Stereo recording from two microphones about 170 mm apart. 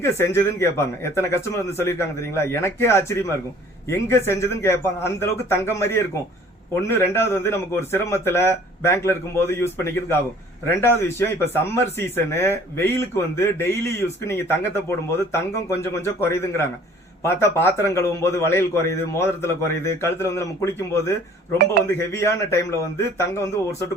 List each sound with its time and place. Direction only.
0.0 s speech: 15° left (ahead or behind)